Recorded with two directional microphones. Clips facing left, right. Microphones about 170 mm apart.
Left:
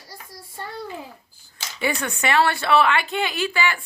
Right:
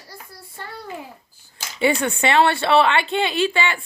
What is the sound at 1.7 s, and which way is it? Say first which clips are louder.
A woman's voice: right 6 dB; 25° right (ahead or behind).